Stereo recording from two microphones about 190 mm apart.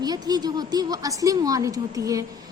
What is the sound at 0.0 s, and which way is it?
A woman's voice, 20° right (ahead or behind).